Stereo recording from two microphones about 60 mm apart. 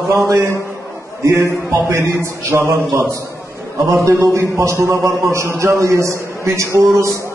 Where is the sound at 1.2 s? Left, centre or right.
Right.